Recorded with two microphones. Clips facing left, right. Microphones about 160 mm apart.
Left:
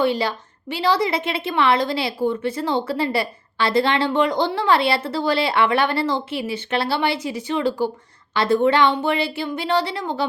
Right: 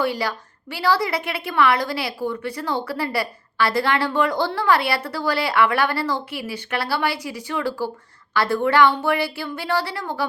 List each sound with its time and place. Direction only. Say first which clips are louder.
0.0 s a woman's voice: left 3 dB; 25° left (ahead or behind)